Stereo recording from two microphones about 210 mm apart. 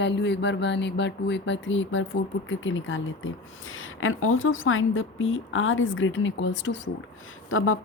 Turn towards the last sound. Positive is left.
turn(degrees=75)  # may be behind; listen again after turning